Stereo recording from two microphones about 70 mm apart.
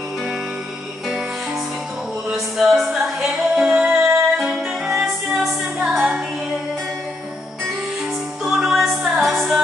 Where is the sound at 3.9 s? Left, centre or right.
Right.